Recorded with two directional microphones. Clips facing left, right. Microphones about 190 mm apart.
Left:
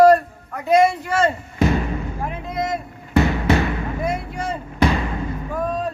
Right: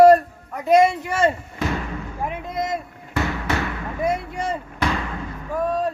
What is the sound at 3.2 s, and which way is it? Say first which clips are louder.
Basketball bounce: left 6 dB; 20° left (ahead or behind).